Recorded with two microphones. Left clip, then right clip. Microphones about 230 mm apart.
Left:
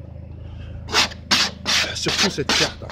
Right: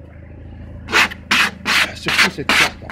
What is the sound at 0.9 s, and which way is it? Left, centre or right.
Rub, centre.